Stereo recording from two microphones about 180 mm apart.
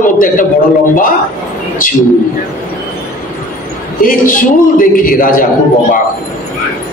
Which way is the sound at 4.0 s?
50° left (ahead or behind).